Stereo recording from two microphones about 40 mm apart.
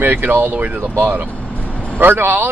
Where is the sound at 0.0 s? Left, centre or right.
Right.